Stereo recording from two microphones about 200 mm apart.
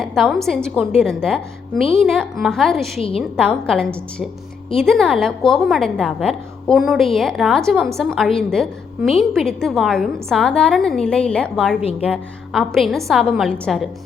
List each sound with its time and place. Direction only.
0.0 s a woman's voice: centre (ahead or behind)
11.8 s a woman's voice: 30° left (ahead or behind)
12.0 s a woman's voice: centre (ahead or behind)